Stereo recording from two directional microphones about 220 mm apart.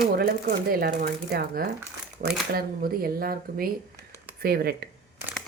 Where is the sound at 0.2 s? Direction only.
45° right (ahead or behind).